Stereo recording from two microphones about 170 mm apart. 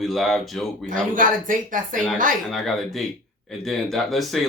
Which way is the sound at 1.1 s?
50° right (ahead or behind).